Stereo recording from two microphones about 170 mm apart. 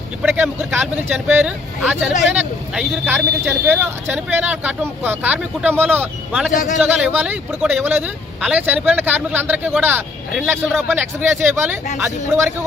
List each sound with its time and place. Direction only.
0.2 s vehicle: 10° right (ahead or behind)
0.4 s speech: 5° right (ahead or behind)
3.7 s speech: 10° right (ahead or behind)
6.5 s a man's voice: 45° left (ahead or behind)
6.7 s speech: 5° right (ahead or behind)